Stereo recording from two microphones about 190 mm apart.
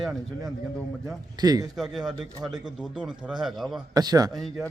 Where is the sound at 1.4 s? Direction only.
20° right (ahead or behind).